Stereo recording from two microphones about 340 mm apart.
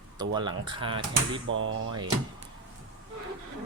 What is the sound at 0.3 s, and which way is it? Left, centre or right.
Speech, centre.